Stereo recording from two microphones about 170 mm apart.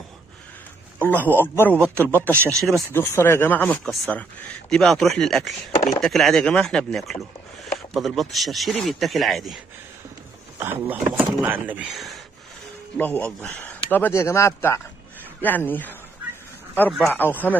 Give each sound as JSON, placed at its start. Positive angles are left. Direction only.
{"t": 0.9, "sound": "a man's voice", "side_deg": 10}
{"t": 2.9, "sound": "a man's voice", "side_deg": 15}
{"t": 10.6, "sound": "speech", "side_deg": -10}
{"t": 12.9, "sound": "a man's voice", "side_deg": 10}
{"t": 17.1, "sound": "a man's voice", "side_deg": 10}